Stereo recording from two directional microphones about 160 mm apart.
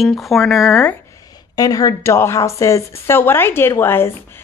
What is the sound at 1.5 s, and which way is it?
A woman's voice, 20° left (ahead or behind).